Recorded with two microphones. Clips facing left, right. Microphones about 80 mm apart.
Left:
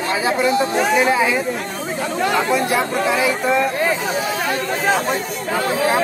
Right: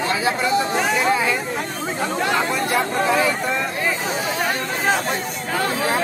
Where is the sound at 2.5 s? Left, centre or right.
Centre.